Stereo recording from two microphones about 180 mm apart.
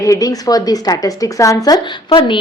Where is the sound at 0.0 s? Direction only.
20° left (ahead or behind).